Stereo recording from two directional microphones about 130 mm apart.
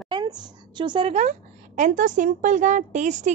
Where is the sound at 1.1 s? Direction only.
65° right (ahead or behind).